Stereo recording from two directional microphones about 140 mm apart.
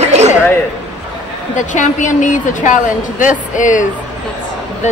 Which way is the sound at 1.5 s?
60° left (ahead or behind).